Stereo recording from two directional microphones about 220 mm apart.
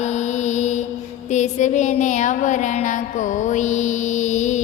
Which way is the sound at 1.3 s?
30° left (ahead or behind).